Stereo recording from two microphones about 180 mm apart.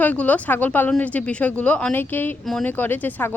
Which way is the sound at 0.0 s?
10° left (ahead or behind).